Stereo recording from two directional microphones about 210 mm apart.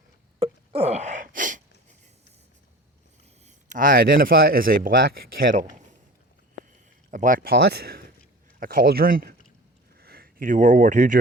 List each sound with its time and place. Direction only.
0.3 s wail: 25° right (ahead or behind)
3.4 s a man's voice: 40° right (ahead or behind)
7.1 s a man's voice: 40° right (ahead or behind)